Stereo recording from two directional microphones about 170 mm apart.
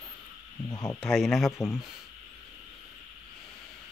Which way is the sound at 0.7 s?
20° left (ahead or behind).